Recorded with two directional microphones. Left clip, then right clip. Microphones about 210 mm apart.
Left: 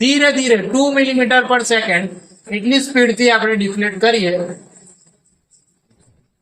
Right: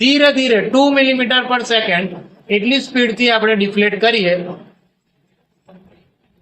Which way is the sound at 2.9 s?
25° right (ahead or behind).